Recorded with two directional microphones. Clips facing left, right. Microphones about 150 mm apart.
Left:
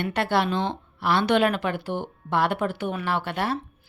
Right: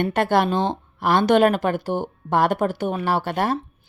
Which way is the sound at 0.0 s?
45° right (ahead or behind).